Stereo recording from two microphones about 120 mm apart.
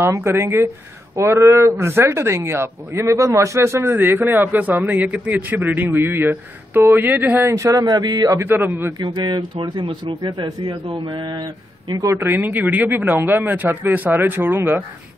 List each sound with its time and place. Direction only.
0.0 s speech: 20° right (ahead or behind)
8.4 s a man's voice: 15° right (ahead or behind)
9.0 s a man's voice: 40° right (ahead or behind); by 14.8 s 20° right (ahead or behind)